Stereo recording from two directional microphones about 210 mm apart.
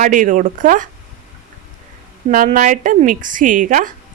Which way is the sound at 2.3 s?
40° right (ahead or behind).